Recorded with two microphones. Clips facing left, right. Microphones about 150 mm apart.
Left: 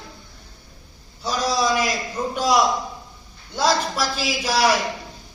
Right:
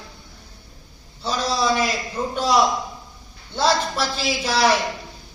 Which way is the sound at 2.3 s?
10° left (ahead or behind).